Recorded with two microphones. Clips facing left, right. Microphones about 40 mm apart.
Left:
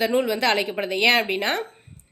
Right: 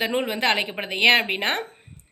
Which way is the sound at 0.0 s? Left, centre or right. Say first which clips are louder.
Left 2 dB; right.